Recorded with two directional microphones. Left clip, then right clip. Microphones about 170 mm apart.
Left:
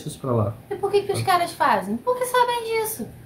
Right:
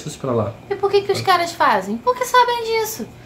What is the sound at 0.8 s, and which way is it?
A woman's voice, 15° right (ahead or behind).